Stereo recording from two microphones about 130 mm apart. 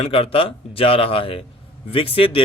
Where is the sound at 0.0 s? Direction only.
45° left (ahead or behind).